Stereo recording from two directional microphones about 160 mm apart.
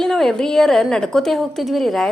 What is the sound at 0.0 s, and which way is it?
A woman's voice, centre (ahead or behind).